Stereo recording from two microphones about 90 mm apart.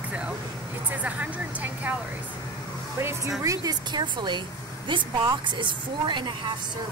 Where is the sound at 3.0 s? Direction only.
25° right (ahead or behind).